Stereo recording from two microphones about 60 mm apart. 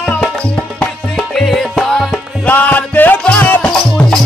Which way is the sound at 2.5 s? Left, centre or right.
Left.